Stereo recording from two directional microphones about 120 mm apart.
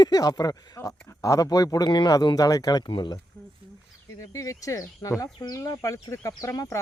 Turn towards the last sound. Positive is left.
turn(degrees=25)  # may be behind; listen again after turning